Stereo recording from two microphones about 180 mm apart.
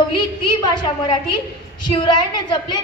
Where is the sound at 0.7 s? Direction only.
25° left (ahead or behind).